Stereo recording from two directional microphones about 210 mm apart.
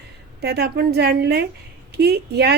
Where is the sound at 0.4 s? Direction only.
50° right (ahead or behind).